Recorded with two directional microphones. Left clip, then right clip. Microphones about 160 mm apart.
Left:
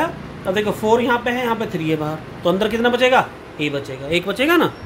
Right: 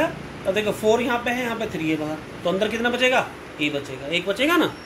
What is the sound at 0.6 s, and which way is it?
Speech, 90° left.